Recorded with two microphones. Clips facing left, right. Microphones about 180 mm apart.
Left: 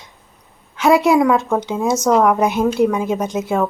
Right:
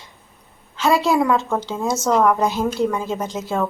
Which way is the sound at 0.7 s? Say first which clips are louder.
Left 4 dB; 15° left (ahead or behind).